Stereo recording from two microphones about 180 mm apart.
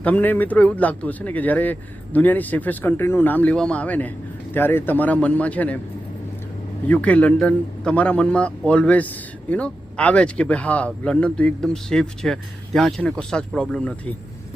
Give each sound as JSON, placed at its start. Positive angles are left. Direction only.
{"t": 0.0, "sound": "a man's voice", "side_deg": 10}
{"t": 6.8, "sound": "a man's voice", "side_deg": 5}